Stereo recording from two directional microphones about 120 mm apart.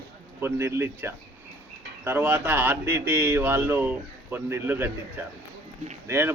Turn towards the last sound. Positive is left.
turn(degrees=-20)  # may be behind; listen again after turning